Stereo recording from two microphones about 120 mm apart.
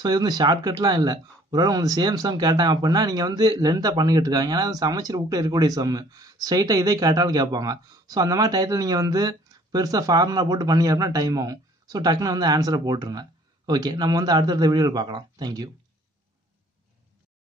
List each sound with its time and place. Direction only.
0.0 s speech: 35° right (ahead or behind)